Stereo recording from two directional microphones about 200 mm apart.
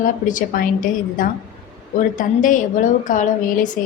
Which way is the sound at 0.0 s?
40° left (ahead or behind).